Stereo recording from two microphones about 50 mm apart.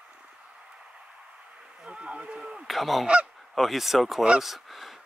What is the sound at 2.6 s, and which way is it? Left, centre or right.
Goose, centre.